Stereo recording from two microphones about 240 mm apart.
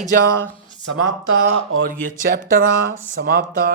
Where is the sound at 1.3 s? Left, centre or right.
Right.